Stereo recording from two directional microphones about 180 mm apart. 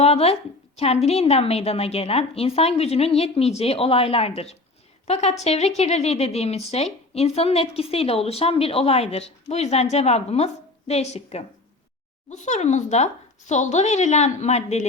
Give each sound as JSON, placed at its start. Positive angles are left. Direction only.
{"t": 0.0, "sound": "a woman's voice", "side_deg": 35}